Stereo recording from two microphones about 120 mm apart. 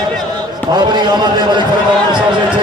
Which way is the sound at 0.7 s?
35° right (ahead or behind).